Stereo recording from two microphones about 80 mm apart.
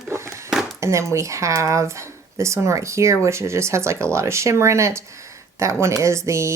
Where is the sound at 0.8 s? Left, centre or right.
Right.